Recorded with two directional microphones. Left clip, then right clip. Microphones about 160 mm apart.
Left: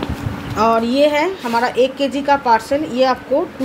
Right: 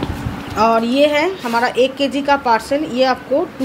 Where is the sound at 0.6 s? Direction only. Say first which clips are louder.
Right 1 dB; centre (ahead or behind).